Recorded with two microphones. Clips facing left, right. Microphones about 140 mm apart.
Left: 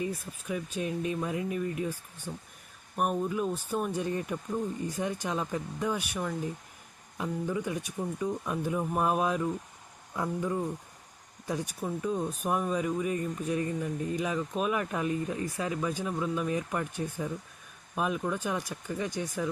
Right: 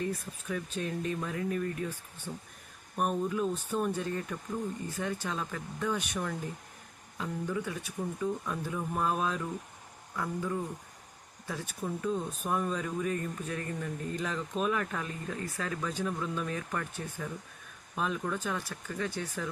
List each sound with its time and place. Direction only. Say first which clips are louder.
0.0 s speech: left 1 dB; 10° left (ahead or behind)